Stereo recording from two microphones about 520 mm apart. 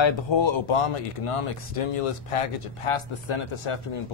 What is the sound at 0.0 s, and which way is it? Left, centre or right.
Speech, left.